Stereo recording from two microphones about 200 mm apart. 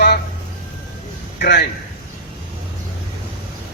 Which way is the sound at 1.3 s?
55° left (ahead or behind).